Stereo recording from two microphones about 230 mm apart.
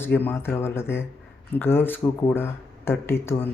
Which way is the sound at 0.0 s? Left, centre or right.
Centre.